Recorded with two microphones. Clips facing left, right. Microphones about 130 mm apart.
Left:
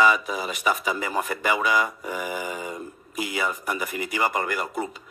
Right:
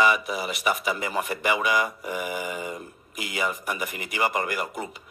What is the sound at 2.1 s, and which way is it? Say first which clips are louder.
Mantra: even; 35° left (ahead or behind).